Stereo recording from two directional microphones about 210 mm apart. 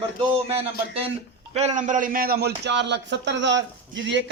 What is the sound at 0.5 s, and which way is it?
Music, 25° right (ahead or behind).